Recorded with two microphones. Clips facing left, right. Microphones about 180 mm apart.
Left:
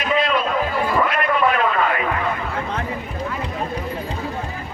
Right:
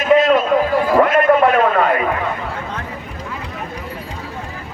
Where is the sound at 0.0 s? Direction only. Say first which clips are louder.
Right 7 dB; 45° right (ahead or behind).